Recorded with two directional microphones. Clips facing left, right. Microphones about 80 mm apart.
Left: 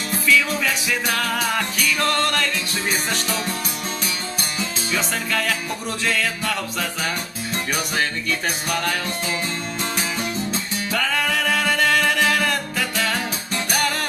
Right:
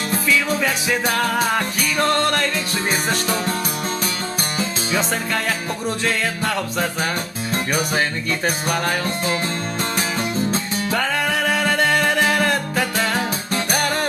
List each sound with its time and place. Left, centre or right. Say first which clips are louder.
0.3 s music: right 1 dB; right
4.9 s music: right 2 dB; right
8.4 s music: right 4 dB; right
10.9 s music: right 1 dB; right